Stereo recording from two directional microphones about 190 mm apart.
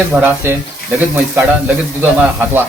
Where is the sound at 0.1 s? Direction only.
10° right (ahead or behind).